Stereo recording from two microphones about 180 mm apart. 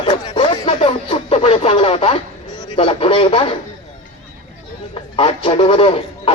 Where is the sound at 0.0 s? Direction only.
30° left (ahead or behind).